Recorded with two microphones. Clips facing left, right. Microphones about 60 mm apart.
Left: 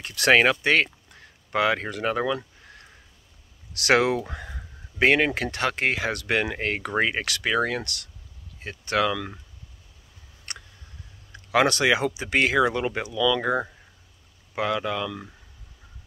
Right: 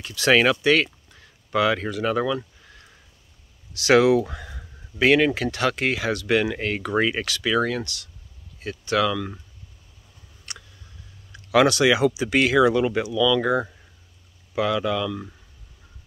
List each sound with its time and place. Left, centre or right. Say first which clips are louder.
0.0 s speech: even; left
3.7 s speech: right 3 dB; left
4.0 s speech: right 6 dB; left
10.5 s tick: left 1 dB; left
11.3 s speech: right 3 dB; left
13.4 s speech: right 3 dB; left
14.5 s speech: right 3 dB; left